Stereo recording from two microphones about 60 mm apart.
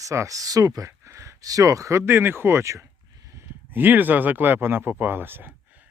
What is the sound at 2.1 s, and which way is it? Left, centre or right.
Speech, right.